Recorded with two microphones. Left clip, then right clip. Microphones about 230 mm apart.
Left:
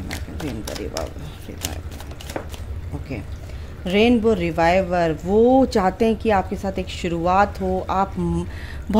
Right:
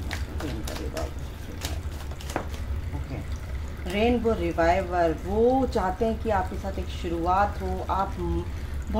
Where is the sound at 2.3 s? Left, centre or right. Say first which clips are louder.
Left 1 dB; centre.